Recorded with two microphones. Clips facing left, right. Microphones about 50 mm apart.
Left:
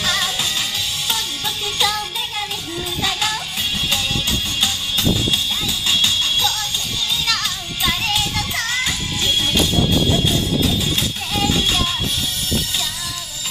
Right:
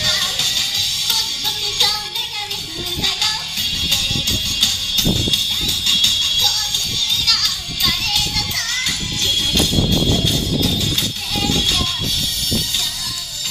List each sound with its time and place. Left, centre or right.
0.0 s music: centre
3.0 s music: centre